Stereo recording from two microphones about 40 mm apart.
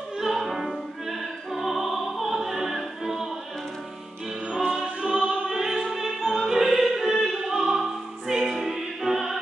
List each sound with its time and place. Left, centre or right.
0.2 s music: centre
4.6 s music: centre
5.5 s opera: centre
8.3 s music: centre